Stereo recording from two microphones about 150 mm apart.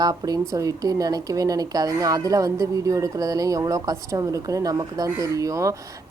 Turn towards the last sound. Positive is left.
turn(degrees=-20)  # may be behind; listen again after turning